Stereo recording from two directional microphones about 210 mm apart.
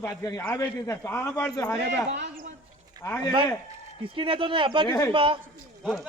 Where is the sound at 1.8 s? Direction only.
55° right (ahead or behind).